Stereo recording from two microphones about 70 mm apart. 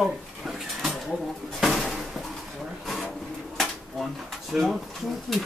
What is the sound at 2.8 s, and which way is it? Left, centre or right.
Drawer open or close, centre.